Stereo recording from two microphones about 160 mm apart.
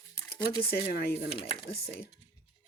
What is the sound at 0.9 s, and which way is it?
Speech, 75° left (ahead or behind).